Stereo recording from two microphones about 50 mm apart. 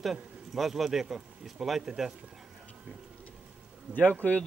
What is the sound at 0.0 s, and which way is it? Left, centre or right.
A man's voice, centre.